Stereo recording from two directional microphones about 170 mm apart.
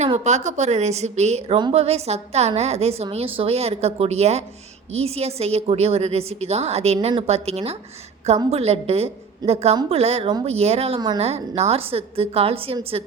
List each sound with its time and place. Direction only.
0.3 s a woman's voice: 40° right (ahead or behind)
9.4 s a woman's voice: 25° right (ahead or behind)
9.9 s a woman's voice: 40° right (ahead or behind)